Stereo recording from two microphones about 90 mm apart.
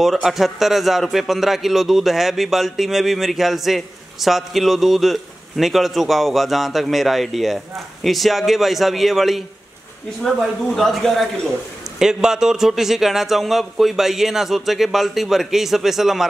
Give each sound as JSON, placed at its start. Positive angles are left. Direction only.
{"t": 0.0, "sound": "a man's voice", "side_deg": 0}